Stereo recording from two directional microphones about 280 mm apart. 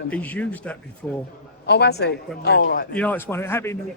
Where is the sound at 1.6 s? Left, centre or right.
Left.